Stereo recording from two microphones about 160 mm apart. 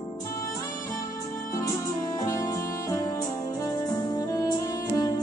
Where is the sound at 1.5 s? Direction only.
20° left (ahead or behind).